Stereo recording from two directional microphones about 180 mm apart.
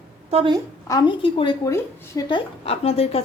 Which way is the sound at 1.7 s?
15° left (ahead or behind).